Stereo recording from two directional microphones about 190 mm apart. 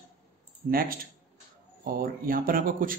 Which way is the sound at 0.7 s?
50° right (ahead or behind).